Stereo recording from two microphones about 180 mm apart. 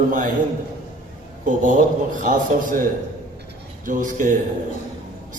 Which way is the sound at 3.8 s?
45° right (ahead or behind).